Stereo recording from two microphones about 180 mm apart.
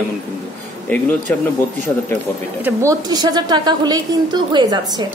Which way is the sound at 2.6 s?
15° right (ahead or behind).